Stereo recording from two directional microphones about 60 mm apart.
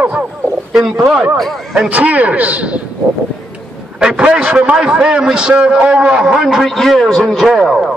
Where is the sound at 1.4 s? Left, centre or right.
Centre.